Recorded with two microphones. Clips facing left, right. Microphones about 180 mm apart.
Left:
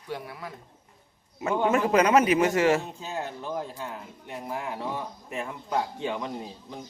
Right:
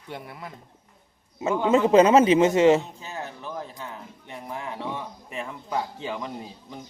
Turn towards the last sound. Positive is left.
turn(degrees=0)  # may be behind; listen again after turning